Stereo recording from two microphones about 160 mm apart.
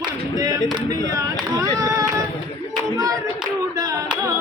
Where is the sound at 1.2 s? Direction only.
20° right (ahead or behind).